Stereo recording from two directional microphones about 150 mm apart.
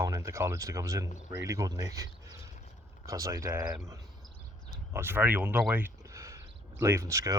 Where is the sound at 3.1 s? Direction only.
20° right (ahead or behind).